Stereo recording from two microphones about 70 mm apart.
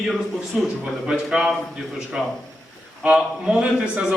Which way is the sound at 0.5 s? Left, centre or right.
Centre.